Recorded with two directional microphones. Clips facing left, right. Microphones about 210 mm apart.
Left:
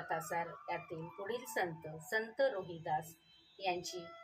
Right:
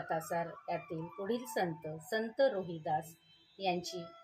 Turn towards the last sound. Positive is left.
turn(degrees=-40)  # may be behind; listen again after turning